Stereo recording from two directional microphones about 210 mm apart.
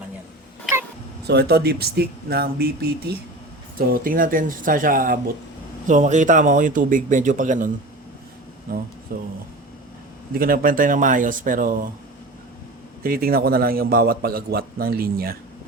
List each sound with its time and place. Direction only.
1.3 s a man's voice: 50° right (ahead or behind)
9.1 s a man's voice: 45° right (ahead or behind)
10.3 s a man's voice: 45° right (ahead or behind)
13.0 s a man's voice: 45° right (ahead or behind)